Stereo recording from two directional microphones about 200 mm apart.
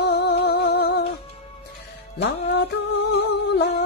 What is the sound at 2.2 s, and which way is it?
Music, 55° left (ahead or behind).